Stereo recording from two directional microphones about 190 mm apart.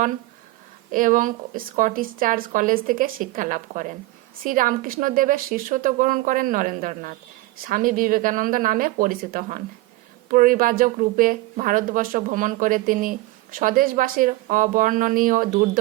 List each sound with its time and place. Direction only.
0.9 s speech: 45° right (ahead or behind)